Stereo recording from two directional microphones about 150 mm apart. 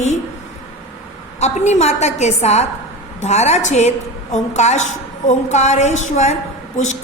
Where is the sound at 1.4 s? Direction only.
50° left (ahead or behind).